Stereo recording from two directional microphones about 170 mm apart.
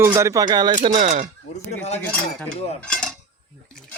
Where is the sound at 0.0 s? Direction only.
15° right (ahead or behind).